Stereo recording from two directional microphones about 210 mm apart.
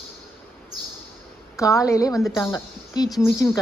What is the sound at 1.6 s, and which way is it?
A woman's voice, 15° left (ahead or behind).